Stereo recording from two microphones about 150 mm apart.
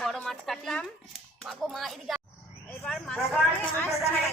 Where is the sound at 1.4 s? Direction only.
Centre (ahead or behind).